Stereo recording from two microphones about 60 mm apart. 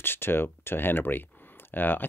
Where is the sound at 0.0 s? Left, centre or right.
Left.